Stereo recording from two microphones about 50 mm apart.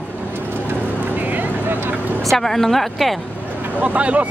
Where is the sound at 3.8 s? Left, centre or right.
Right.